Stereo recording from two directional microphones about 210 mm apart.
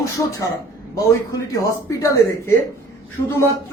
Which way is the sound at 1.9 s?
15° left (ahead or behind).